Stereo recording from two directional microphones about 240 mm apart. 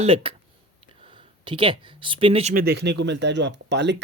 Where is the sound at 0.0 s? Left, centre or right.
Right.